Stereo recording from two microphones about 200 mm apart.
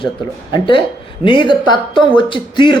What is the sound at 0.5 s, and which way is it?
Speech, 25° left (ahead or behind).